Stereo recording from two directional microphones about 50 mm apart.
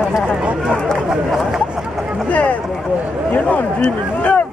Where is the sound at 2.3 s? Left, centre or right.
Left.